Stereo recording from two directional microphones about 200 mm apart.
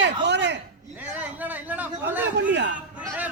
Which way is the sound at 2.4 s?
60° right (ahead or behind).